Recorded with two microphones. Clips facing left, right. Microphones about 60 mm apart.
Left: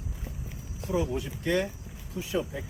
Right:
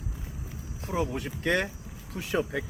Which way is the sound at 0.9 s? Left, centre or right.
Right.